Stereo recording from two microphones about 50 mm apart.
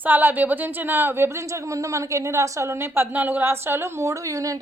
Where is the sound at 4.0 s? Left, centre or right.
Right.